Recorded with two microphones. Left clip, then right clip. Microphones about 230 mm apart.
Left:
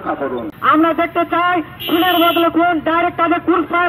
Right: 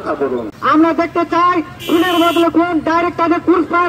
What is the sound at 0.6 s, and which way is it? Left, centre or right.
A man's voice, left.